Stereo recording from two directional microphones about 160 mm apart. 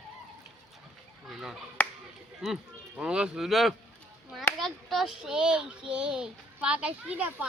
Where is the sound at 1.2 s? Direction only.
Centre (ahead or behind).